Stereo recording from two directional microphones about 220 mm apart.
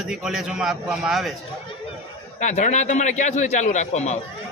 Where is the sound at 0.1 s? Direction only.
Centre (ahead or behind).